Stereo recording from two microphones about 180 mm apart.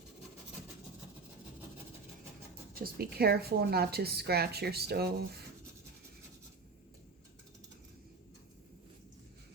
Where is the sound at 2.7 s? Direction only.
55° right (ahead or behind).